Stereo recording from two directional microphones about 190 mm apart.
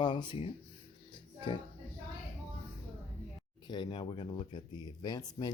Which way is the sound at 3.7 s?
25° left (ahead or behind).